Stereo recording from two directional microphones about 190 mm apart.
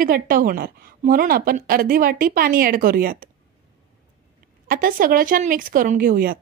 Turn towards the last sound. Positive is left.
turn(degrees=-50)  # may be behind; listen again after turning